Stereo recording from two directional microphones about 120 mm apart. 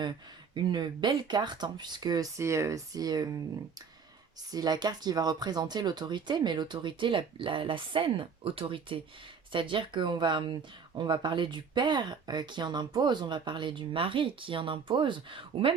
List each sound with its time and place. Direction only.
0.0 s speech: 40° right (ahead or behind)
4.5 s speech: 35° right (ahead or behind)